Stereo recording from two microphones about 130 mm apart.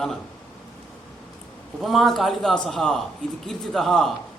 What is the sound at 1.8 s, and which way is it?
A man's voice, centre (ahead or behind).